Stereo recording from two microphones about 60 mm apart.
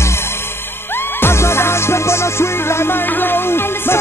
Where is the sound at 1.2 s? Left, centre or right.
Left.